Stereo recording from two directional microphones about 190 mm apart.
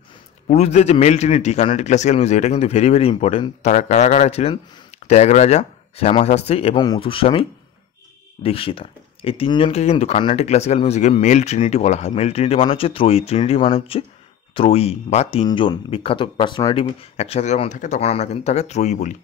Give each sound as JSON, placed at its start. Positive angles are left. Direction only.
{"t": 0.5, "sound": "a man's voice", "side_deg": 35}